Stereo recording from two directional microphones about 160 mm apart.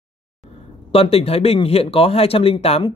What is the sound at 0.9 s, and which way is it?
Speech, 40° left (ahead or behind).